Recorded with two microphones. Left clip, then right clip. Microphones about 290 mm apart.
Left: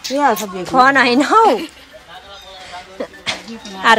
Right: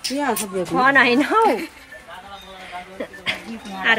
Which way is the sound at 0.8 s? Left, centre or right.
Centre.